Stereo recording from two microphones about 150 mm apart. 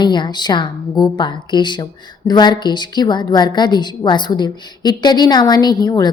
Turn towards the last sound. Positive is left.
turn(degrees=25)  # may be behind; listen again after turning